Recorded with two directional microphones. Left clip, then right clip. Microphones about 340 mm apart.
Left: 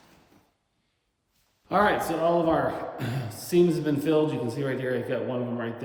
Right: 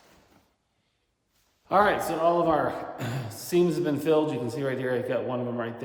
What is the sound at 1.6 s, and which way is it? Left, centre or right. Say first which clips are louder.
Speech: right 1 dB; centre.